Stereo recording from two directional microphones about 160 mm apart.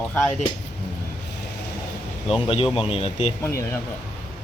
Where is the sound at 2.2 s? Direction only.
35° left (ahead or behind).